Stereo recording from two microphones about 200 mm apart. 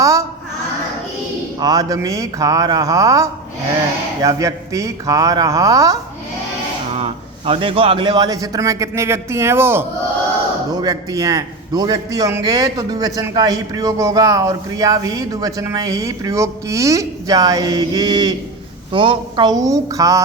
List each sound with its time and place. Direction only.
0.0 s a sound: 15° right (ahead or behind)
1.5 s a man's voice: 20° right (ahead or behind)
6.9 s a man's voice: 30° right (ahead or behind)